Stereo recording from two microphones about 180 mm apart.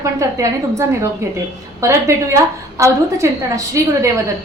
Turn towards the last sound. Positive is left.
turn(degrees=-15)  # may be behind; listen again after turning